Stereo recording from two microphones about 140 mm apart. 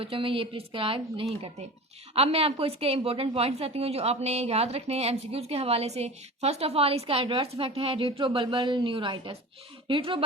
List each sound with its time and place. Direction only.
0.0 s a woman's voice: 40° right (ahead or behind)